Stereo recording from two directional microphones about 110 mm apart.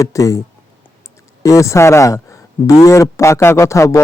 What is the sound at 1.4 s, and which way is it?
Speech, 30° left (ahead or behind).